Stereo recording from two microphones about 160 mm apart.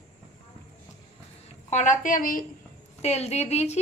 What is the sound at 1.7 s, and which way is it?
Speech, 50° left (ahead or behind).